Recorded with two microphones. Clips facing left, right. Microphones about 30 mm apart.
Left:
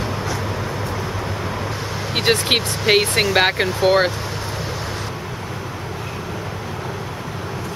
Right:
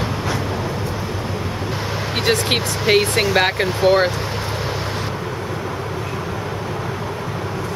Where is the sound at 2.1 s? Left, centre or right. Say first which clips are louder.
Left 1 dB; centre.